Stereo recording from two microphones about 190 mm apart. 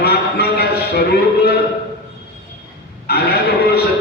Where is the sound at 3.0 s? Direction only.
55° left (ahead or behind).